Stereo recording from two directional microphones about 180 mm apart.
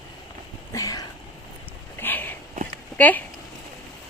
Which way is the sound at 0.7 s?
20° left (ahead or behind).